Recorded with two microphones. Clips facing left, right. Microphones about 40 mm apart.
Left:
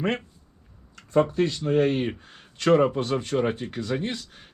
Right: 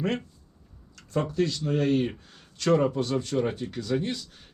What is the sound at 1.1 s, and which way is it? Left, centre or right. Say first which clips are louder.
Speech: left 5 dB; left.